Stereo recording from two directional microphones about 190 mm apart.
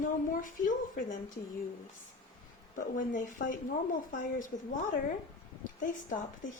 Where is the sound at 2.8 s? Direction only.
45° left (ahead or behind).